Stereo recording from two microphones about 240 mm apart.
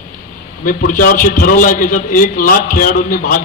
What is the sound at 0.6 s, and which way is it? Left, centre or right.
A man's voice, left.